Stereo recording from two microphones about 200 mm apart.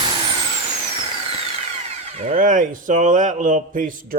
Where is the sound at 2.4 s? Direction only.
35° right (ahead or behind).